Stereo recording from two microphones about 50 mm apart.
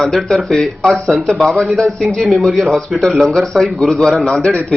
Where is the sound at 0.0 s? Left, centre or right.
Centre.